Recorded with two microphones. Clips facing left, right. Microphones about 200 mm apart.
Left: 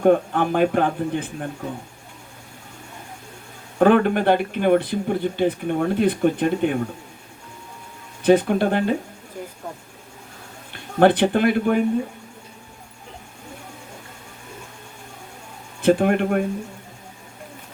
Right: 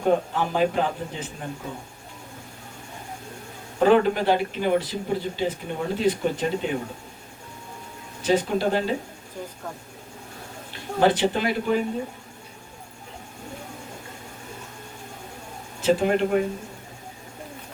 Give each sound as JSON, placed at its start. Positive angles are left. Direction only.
{"t": 0.0, "sound": "speech", "side_deg": 55}
{"t": 3.8, "sound": "speech", "side_deg": 55}
{"t": 8.2, "sound": "speech", "side_deg": 55}
{"t": 10.7, "sound": "a man's voice", "side_deg": 55}
{"t": 15.8, "sound": "speech", "side_deg": 55}